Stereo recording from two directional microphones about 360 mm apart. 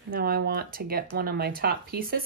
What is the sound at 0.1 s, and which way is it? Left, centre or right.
Speech, right.